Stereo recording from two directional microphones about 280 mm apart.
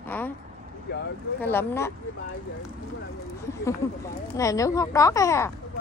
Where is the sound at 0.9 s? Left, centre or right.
Left.